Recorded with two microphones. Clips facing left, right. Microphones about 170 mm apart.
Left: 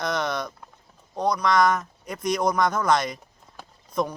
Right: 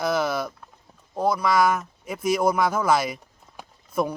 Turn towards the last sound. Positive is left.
turn(degrees=-10)  # may be behind; listen again after turning